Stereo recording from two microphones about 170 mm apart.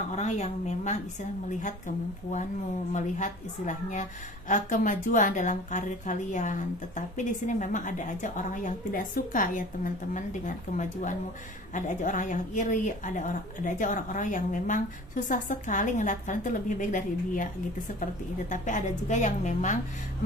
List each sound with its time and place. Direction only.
0.1 s speech: 45° left (ahead or behind)
2.9 s a woman's voice: 45° left (ahead or behind)